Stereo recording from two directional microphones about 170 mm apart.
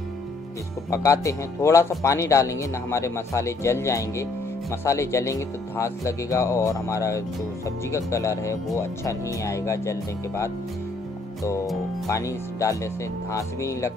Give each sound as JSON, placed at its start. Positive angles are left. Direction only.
{"t": 0.8, "sound": "speech", "side_deg": 20}
{"t": 12.1, "sound": "speech", "side_deg": 20}